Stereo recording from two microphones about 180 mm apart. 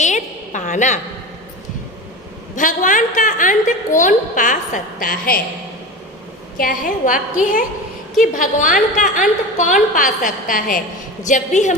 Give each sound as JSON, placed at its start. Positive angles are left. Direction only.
{"t": 0.0, "sound": "a sound", "side_deg": 45}
{"t": 2.6, "sound": "a woman's voice", "side_deg": 45}
{"t": 6.6, "sound": "a woman's voice", "side_deg": 50}